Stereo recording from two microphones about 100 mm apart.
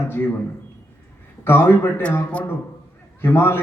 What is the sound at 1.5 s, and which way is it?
A man's voice, 25° left (ahead or behind).